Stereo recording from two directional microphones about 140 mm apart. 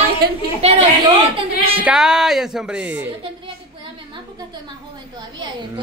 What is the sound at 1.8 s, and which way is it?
Speech, 5° right (ahead or behind).